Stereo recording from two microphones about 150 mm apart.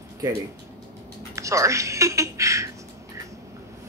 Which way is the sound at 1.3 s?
20° right (ahead or behind).